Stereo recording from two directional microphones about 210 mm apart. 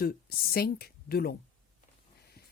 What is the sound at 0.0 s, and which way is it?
A woman's voice, 45° left (ahead or behind).